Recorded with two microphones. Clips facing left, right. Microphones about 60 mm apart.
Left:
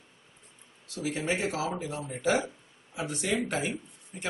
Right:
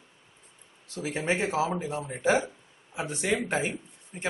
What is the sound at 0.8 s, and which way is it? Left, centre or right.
Speech, right.